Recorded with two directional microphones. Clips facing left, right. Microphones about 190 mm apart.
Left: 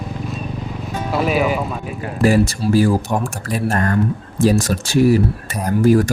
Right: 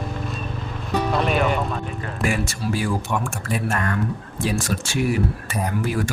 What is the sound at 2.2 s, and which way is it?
Speech, 35° left (ahead or behind).